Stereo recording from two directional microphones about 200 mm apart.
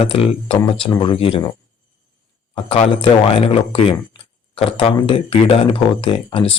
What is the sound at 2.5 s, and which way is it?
Speech, 25° left (ahead or behind).